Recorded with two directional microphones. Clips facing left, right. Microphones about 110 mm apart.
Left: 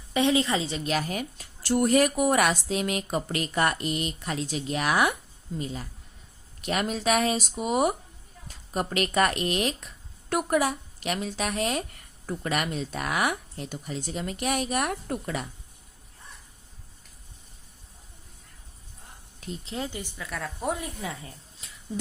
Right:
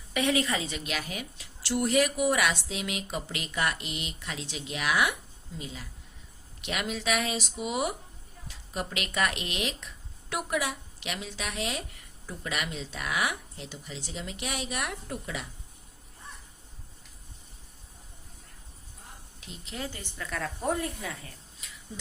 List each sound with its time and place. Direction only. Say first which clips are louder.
0.1 s speech: left 4 dB; 25° left (ahead or behind); by 15.4 s 45° left (ahead or behind)
19.4 s speech: left 11 dB; 40° left (ahead or behind)
19.7 s speech: left 3 dB; 20° left (ahead or behind)
21.6 s a sound: right 1 dB; 35° left (ahead or behind)